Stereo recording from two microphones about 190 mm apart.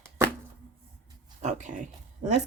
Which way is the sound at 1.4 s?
40° right (ahead or behind).